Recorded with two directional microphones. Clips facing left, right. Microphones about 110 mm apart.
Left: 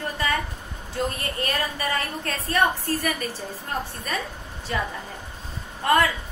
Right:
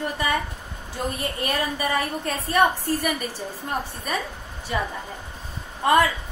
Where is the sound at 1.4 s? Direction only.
15° right (ahead or behind).